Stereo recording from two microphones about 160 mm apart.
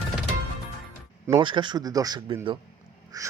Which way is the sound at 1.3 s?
30° right (ahead or behind).